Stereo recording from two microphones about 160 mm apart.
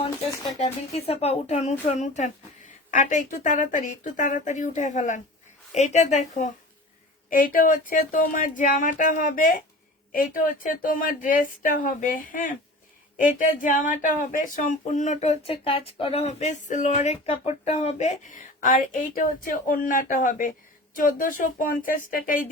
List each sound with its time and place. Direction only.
0.5 s speech: 40° left (ahead or behind)
7.3 s speech: 60° left (ahead or behind)